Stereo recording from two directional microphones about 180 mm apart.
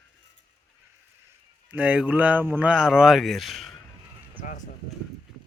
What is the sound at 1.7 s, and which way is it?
Speech, 10° right (ahead or behind).